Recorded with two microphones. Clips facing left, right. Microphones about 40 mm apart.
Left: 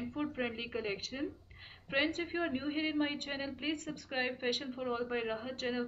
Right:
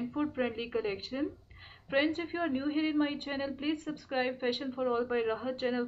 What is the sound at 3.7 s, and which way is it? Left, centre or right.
Speech, centre.